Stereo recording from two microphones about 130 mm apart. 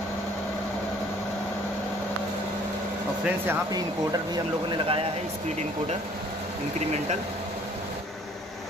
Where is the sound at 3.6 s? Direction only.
30° right (ahead or behind).